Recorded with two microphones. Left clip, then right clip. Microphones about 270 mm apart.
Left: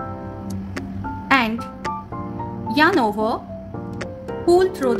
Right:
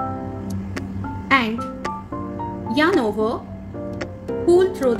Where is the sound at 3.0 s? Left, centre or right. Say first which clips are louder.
Left 1 dB; left.